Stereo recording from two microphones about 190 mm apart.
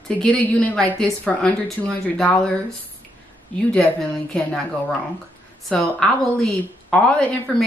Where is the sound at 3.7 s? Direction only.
5° left (ahead or behind).